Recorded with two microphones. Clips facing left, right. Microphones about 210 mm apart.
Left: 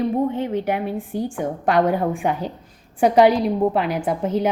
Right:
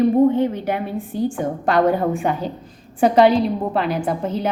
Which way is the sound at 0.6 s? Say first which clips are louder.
Even; 10° left (ahead or behind).